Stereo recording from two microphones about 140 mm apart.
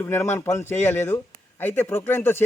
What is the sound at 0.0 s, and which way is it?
A man's voice, 20° left (ahead or behind).